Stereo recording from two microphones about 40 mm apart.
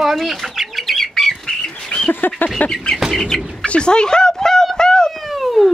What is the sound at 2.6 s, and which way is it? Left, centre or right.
Speech, left.